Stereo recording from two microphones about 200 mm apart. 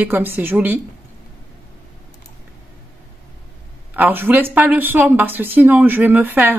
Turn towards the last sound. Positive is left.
turn(degrees=-10)  # may be behind; listen again after turning